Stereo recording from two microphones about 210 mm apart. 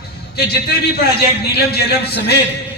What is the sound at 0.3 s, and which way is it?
A man's voice, 50° left (ahead or behind).